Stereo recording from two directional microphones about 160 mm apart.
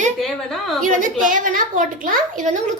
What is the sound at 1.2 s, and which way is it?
A woman's voice, 55° right (ahead or behind).